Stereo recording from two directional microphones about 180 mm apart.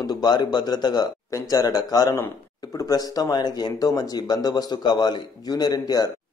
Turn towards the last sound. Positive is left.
turn(degrees=20)  # may be behind; listen again after turning